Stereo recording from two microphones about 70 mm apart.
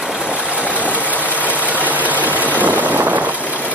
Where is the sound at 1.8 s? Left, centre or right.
Right.